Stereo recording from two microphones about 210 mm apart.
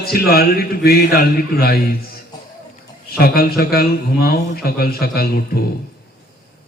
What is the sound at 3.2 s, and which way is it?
A man's voice, 45° left (ahead or behind).